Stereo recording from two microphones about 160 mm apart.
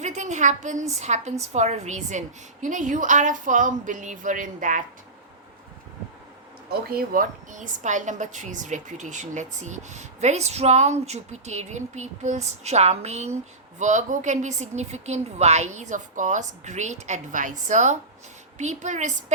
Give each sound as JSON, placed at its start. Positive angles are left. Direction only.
{"t": 0.0, "sound": "a woman's voice", "side_deg": -45}
{"t": 6.9, "sound": "a woman's voice", "side_deg": -60}